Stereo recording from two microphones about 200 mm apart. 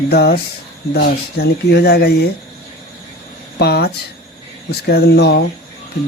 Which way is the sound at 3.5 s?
55° left (ahead or behind).